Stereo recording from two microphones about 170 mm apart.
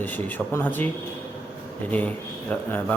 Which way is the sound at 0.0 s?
10° left (ahead or behind).